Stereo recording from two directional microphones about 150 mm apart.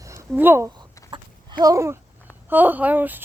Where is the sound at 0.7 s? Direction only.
30° right (ahead or behind).